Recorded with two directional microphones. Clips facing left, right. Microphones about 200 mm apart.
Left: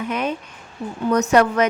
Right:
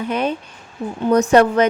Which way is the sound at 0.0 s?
30° right (ahead or behind).